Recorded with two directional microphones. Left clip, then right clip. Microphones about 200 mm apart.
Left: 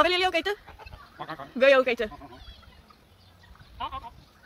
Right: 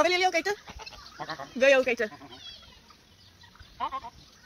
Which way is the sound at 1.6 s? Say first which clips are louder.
Left 2 dB; 15° left (ahead or behind).